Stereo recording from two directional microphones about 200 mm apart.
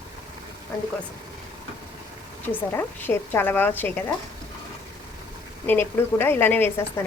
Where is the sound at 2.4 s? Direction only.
10° left (ahead or behind).